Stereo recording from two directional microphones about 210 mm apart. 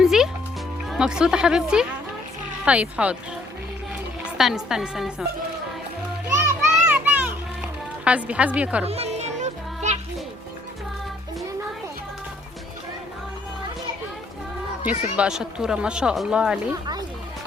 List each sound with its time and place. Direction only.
0.0 s music: centre (ahead or behind)
0.9 s speech: 5° right (ahead or behind)
4.4 s speech: centre (ahead or behind)
6.3 s music: 10° right (ahead or behind)
8.8 s music: 30° right (ahead or behind)
14.8 s speech: 5° right (ahead or behind)